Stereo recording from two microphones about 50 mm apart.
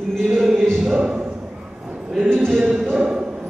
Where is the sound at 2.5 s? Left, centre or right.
Centre.